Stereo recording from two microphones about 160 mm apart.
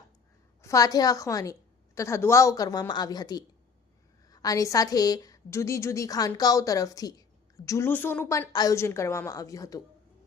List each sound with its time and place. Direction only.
0.6 s a woman's voice: 20° left (ahead or behind)